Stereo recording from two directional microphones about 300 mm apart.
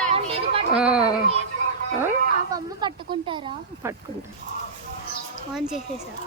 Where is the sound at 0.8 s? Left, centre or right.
Centre.